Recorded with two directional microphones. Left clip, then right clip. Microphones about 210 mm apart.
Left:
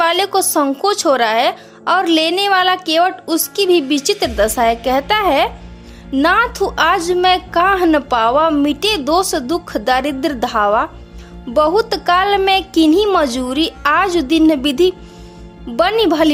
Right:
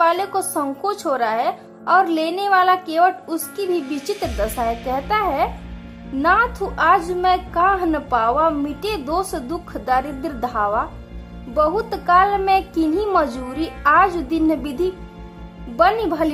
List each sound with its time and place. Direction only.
0.0 s a woman's voice: 30° left (ahead or behind)